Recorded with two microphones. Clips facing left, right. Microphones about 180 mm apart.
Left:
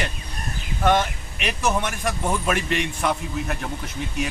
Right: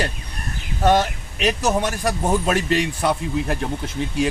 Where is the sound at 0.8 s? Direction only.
40° right (ahead or behind).